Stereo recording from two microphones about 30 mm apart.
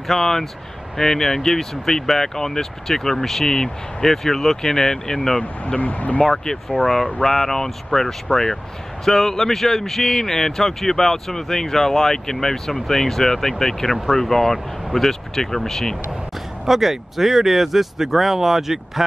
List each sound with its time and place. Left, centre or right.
0.1 s speech: centre
5.8 s speech: left
6.2 s speech: centre
16.6 s speech: centre